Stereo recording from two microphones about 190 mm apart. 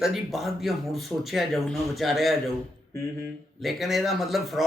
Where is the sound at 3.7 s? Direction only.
Centre (ahead or behind).